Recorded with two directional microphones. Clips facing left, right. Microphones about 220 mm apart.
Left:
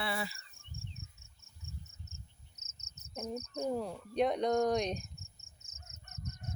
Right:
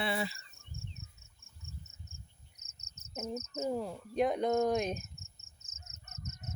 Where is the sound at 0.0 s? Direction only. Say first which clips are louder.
Right 3 dB; 20° right (ahead or behind).